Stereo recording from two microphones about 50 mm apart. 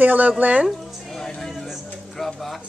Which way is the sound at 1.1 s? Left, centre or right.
Centre.